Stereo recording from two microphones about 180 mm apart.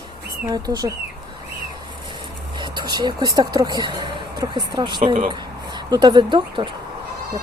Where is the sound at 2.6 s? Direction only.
25° right (ahead or behind).